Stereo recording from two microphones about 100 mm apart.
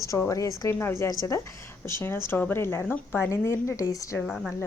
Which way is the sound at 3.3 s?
30° left (ahead or behind).